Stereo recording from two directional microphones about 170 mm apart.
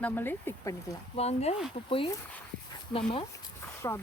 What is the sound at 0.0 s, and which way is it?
Speech, 10° left (ahead or behind).